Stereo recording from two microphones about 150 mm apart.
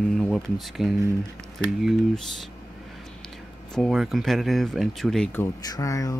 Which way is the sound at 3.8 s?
Centre (ahead or behind).